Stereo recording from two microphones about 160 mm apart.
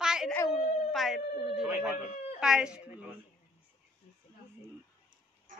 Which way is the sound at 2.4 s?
5° right (ahead or behind).